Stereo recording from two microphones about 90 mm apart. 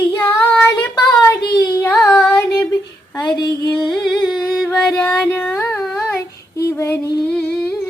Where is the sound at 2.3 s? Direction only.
20° left (ahead or behind).